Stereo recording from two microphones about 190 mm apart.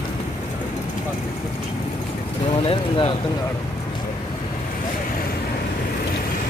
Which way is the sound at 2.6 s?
30° left (ahead or behind).